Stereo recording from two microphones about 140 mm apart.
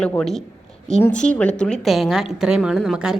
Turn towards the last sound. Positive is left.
turn(degrees=-5)  # may be behind; listen again after turning